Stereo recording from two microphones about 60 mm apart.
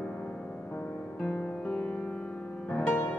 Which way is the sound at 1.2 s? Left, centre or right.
Left.